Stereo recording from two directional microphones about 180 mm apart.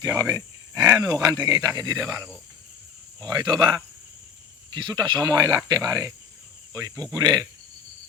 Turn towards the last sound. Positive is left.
turn(degrees=-20)  # may be behind; listen again after turning